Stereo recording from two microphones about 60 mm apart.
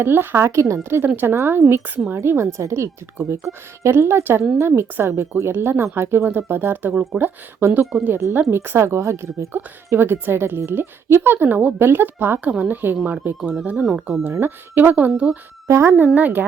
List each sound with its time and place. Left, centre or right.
0.0 s a woman's voice: right
3.9 s a woman's voice: right
5.5 s speech: right
6.9 s speech: centre
7.6 s a woman's voice: right
9.9 s speech: right
12.4 s a woman's voice: right
13.7 s speech: centre
14.3 s speech: right
15.6 s a woman's voice: right
16.1 s speech: right